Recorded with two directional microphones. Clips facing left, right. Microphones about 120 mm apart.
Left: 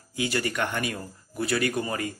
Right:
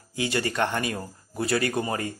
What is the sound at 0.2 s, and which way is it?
Speech, 25° right (ahead or behind).